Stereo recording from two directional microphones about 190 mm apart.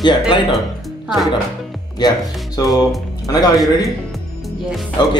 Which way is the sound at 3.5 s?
Centre (ahead or behind).